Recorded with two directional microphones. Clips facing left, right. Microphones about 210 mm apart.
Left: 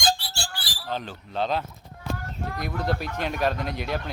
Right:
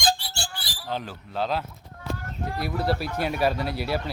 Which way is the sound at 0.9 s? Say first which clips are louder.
Even; 10° right (ahead or behind).